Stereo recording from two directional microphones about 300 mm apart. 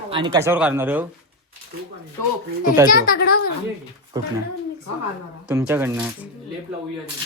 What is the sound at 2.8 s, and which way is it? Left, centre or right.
Speech, left.